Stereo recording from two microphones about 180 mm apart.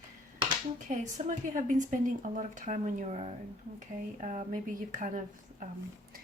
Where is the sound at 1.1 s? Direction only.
45° right (ahead or behind).